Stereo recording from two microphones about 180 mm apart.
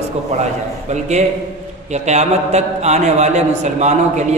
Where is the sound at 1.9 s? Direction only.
40° right (ahead or behind).